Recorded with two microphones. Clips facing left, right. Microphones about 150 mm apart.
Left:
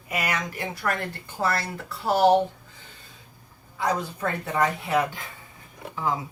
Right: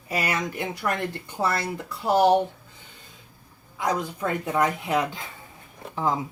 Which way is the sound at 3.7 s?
15° right (ahead or behind).